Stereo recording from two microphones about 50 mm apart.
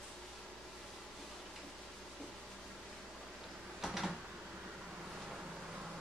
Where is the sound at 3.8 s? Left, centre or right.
Centre.